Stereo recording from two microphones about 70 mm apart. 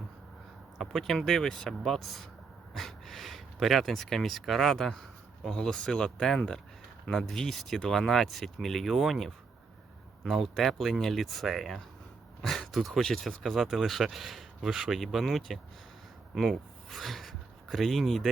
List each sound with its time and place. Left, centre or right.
0.8 s speech: centre